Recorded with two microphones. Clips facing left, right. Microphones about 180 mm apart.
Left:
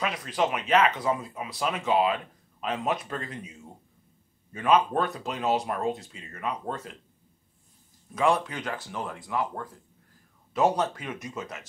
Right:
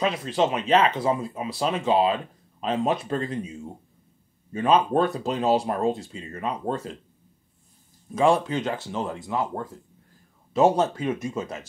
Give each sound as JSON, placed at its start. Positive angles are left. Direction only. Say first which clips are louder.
{"t": 0.0, "sound": "speech", "louder": "right 4 dB", "side_deg": -25}
{"t": 8.1, "sound": "speech", "louder": "right 4 dB", "side_deg": -30}